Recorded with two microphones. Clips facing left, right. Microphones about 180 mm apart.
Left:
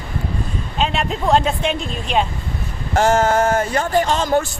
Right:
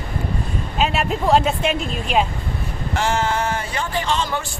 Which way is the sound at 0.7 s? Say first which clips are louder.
Even; 5° right (ahead or behind).